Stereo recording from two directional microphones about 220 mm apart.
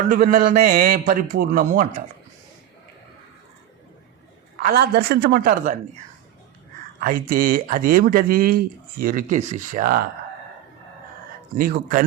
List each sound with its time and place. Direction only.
0.1 s speech: 40° right (ahead or behind)
4.6 s a woman's voice: 45° right (ahead or behind)
7.0 s speech: 40° right (ahead or behind)
11.5 s speech: 40° right (ahead or behind)